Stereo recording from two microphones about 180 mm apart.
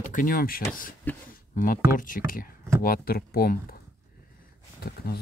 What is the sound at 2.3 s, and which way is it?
Speech, 50° left (ahead or behind).